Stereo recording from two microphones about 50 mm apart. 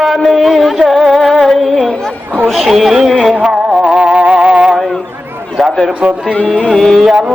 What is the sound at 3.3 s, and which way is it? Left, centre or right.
Music, centre.